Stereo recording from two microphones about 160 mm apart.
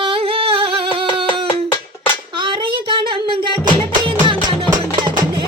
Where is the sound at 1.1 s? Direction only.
35° right (ahead or behind).